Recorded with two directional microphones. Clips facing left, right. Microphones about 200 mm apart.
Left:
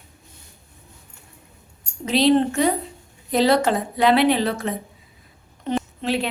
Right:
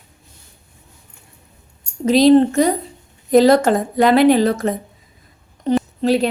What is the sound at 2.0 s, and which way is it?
A woman's voice, 40° right (ahead or behind).